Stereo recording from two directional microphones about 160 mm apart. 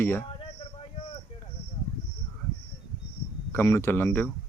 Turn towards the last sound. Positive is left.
turn(degrees=10)  # may be behind; listen again after turning